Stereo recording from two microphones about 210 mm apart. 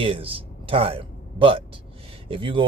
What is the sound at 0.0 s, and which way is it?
Speech, 25° right (ahead or behind).